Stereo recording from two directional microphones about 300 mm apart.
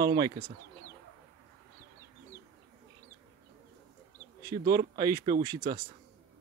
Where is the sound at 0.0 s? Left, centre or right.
Right.